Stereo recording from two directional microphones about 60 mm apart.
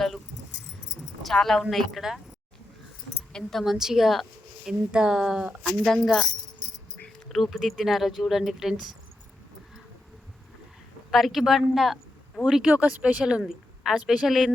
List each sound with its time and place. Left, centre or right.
1.2 s speech: centre
3.6 s a woman's voice: centre
4.9 s a woman's voice: centre
5.6 s speech: centre
7.4 s speech: centre
11.1 s a woman's voice: centre
12.7 s a woman's voice: right; by 14.5 s centre